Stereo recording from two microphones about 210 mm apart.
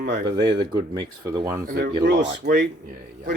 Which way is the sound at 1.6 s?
45° right (ahead or behind).